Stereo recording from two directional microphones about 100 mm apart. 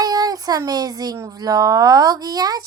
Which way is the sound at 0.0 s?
40° right (ahead or behind).